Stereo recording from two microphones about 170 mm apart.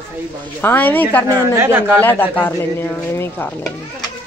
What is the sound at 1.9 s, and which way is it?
A man's voice, 10° left (ahead or behind).